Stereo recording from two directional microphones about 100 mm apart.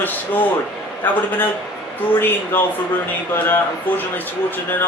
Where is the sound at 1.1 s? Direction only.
15° left (ahead or behind).